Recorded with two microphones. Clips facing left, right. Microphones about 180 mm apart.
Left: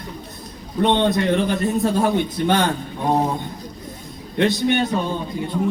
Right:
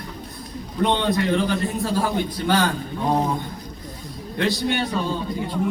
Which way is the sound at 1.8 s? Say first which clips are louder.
Left 4 dB; 20° left (ahead or behind).